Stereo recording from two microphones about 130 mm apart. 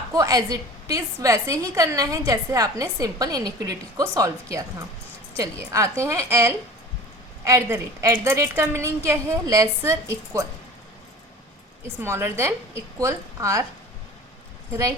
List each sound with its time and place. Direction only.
0.1 s a woman's voice: 30° right (ahead or behind)
12.0 s a woman's voice: 20° right (ahead or behind)
14.7 s a woman's voice: 25° right (ahead or behind)